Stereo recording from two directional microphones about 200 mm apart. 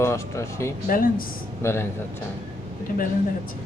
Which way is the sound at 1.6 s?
15° left (ahead or behind).